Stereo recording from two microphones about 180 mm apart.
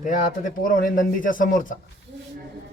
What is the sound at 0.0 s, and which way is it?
Speech, 45° left (ahead or behind).